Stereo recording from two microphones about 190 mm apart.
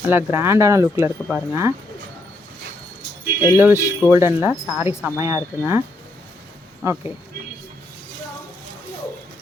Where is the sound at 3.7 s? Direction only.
15° left (ahead or behind).